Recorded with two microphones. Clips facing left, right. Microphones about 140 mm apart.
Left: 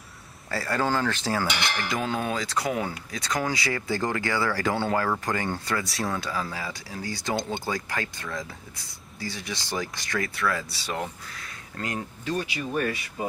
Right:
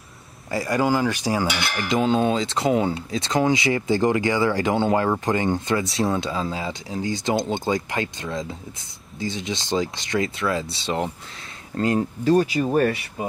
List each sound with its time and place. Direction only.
0.5 s cutlery: 15° right (ahead or behind)
1.9 s speech: 20° right (ahead or behind); by 12.9 s 40° right (ahead or behind)